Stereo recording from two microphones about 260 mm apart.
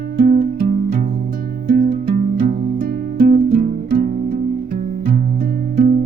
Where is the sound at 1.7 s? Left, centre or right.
Right.